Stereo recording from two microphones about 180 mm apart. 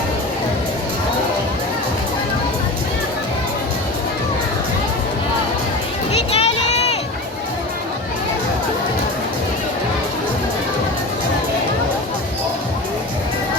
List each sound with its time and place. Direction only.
6.3 s crowd: 35° left (ahead or behind)